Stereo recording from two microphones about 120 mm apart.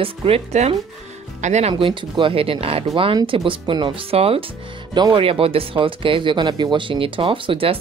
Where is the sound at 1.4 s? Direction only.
75° right (ahead or behind).